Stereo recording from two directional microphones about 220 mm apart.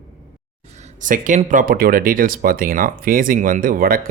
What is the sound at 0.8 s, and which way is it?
Speech, 35° right (ahead or behind).